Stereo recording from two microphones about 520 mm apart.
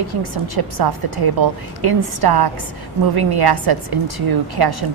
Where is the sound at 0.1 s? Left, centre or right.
Right.